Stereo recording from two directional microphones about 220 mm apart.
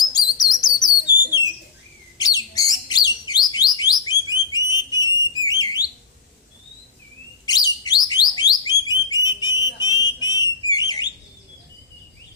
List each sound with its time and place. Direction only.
0.1 s chirp: 15° left (ahead or behind)
2.1 s bird: 15° left (ahead or behind)
7.4 s bird: 15° left (ahead or behind)
8.0 s a sound: 20° left (ahead or behind)